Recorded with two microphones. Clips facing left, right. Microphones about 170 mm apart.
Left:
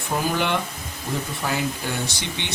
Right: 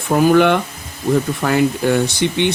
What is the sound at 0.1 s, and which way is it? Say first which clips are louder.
Speech: right 11 dB; 60° right (ahead or behind).